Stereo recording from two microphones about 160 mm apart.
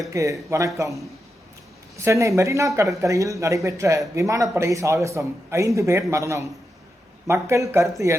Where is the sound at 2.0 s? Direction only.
20° right (ahead or behind).